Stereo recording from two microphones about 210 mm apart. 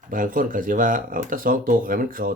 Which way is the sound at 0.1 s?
40° right (ahead or behind).